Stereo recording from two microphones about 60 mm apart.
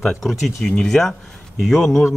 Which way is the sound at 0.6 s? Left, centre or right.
Centre.